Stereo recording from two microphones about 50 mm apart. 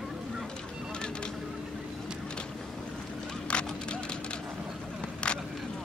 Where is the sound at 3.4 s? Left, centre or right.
Left.